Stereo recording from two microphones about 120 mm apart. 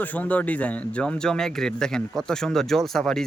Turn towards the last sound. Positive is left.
turn(degrees=5)  # may be behind; listen again after turning